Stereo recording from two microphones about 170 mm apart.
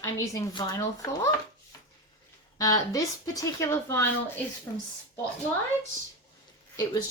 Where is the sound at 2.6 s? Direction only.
20° left (ahead or behind).